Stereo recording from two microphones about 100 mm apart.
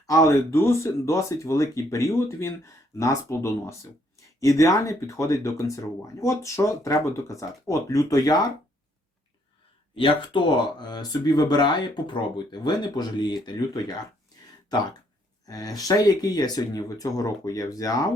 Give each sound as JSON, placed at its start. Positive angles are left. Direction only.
{"t": 0.1, "sound": "speech", "side_deg": 35}
{"t": 9.9, "sound": "speech", "side_deg": 55}
{"t": 15.4, "sound": "speech", "side_deg": 35}